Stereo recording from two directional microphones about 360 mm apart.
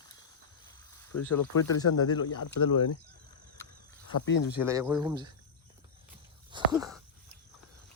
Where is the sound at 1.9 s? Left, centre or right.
Left.